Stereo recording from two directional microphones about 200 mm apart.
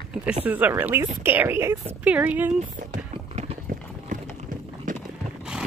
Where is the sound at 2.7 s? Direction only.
35° right (ahead or behind).